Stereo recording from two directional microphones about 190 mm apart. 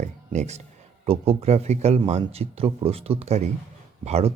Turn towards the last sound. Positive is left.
turn(degrees=-35)  # may be behind; listen again after turning